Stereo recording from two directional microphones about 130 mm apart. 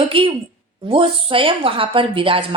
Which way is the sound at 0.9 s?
45° right (ahead or behind).